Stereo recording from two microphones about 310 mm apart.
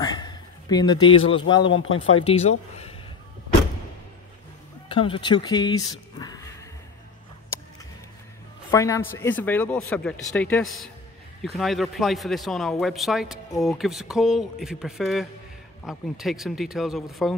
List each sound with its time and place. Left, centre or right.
0.0 s a man's voice: centre
1.7 s speech: left
2.2 s speech: centre
4.8 s speech: centre
8.7 s a man's voice: centre